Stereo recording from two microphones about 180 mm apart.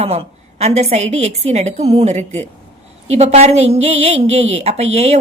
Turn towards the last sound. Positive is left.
turn(degrees=-35)  # may be behind; listen again after turning